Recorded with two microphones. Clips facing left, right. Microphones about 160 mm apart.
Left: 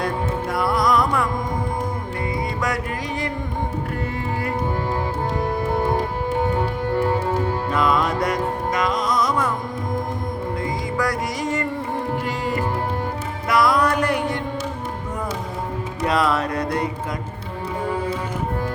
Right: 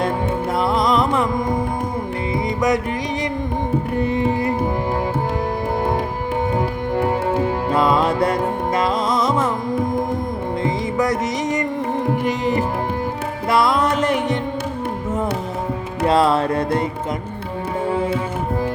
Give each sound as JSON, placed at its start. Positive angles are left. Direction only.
{"t": 0.5, "sound": "music", "side_deg": -25}
{"t": 2.6, "sound": "music", "side_deg": -20}
{"t": 4.0, "sound": "music", "side_deg": -20}
{"t": 7.7, "sound": "music", "side_deg": -30}
{"t": 10.6, "sound": "music", "side_deg": -20}
{"t": 16.0, "sound": "music", "side_deg": -30}